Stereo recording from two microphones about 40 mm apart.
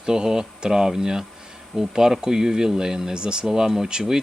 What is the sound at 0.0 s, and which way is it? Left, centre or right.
Speech, centre.